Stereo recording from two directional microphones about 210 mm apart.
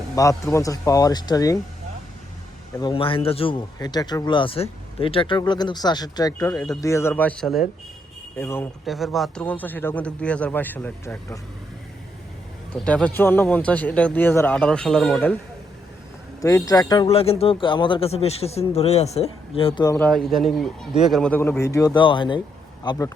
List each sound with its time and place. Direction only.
0.2 s speech: 15° left (ahead or behind)
2.8 s speech: 25° left (ahead or behind)
8.9 s speech: centre (ahead or behind)
12.7 s speech: 5° left (ahead or behind)
16.4 s speech: 15° left (ahead or behind)
20.0 s speech: centre (ahead or behind); by 23.1 s 20° left (ahead or behind)